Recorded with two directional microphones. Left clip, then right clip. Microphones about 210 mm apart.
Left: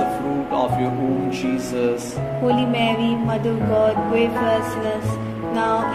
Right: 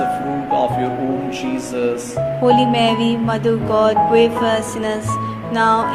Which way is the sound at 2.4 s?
40° right (ahead or behind).